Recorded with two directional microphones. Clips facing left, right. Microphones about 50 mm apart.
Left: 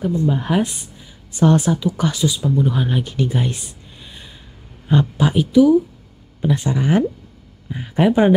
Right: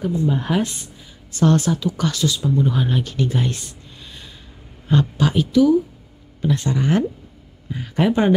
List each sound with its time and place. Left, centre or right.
0.4 s speech: centre
4.0 s snort: centre
4.8 s speech: centre